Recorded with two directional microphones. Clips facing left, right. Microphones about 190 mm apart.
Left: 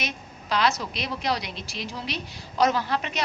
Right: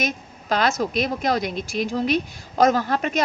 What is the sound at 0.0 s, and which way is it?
A woman's voice, 50° right (ahead or behind).